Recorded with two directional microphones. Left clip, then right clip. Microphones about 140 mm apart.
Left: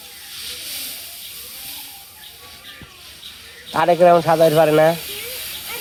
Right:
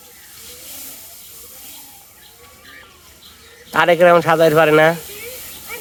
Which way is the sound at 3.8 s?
20° right (ahead or behind).